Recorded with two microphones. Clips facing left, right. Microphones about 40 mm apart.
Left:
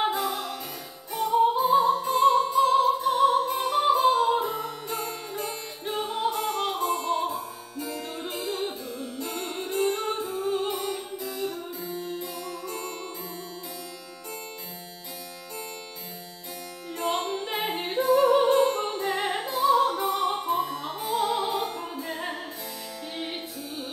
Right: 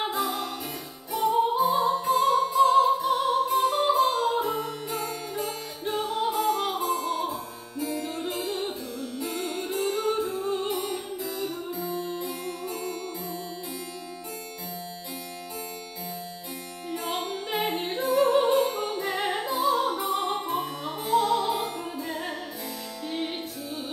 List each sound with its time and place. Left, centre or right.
0.0 s music: centre
2.2 s opera: centre
4.5 s music: centre
7.7 s music: centre
8.2 s music: centre
8.9 s music: centre
9.7 s music: centre
12.0 s music: centre
17.0 s music: centre
17.6 s music: left
18.3 s opera: centre
18.9 s music: centre
21.2 s music: centre
23.1 s music: centre